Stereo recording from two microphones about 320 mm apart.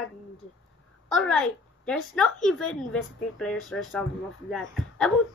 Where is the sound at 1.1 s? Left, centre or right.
Centre.